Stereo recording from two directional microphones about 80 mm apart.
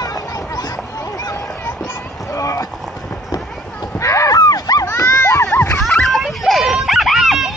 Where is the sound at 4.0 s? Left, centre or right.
Left.